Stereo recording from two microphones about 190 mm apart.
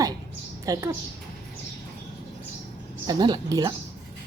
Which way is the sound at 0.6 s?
15° right (ahead or behind).